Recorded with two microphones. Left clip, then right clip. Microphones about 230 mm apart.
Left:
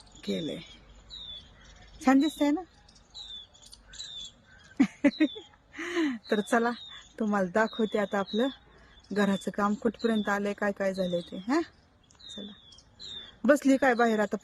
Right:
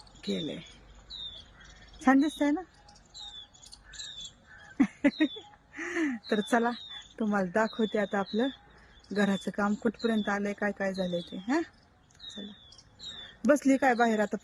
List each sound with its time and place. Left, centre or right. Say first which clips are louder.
0.2 s speech: left 1 dB; centre
2.0 s speech: left 1 dB; centre
5.0 s speech: left 2 dB; centre
7.5 s speech: left 1 dB; centre
11.1 s speech: left 2 dB; left
13.4 s speech: left 1 dB; centre